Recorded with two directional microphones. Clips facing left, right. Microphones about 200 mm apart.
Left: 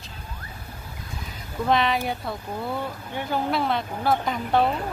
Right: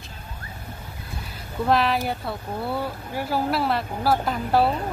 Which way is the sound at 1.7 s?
Centre (ahead or behind).